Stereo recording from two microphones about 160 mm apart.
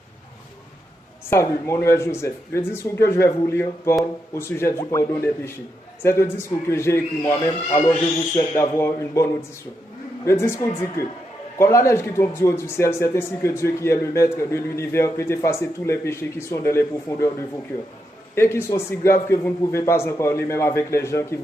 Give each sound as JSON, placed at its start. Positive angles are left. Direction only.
{"t": 1.3, "sound": "a man's voice", "side_deg": 20}
{"t": 10.2, "sound": "speech", "side_deg": 15}
{"t": 18.3, "sound": "speech", "side_deg": 15}